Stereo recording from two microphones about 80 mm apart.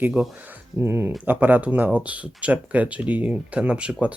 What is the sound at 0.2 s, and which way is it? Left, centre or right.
Speech, centre.